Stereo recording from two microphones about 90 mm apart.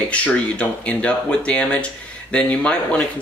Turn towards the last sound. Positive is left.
turn(degrees=10)  # may be behind; listen again after turning